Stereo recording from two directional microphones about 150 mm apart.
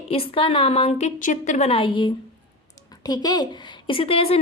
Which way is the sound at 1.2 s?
60° left (ahead or behind).